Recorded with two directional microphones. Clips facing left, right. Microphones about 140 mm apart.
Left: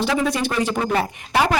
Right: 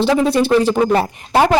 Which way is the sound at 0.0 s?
30° right (ahead or behind).